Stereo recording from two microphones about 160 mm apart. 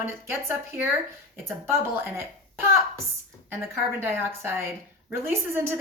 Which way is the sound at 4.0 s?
15° right (ahead or behind).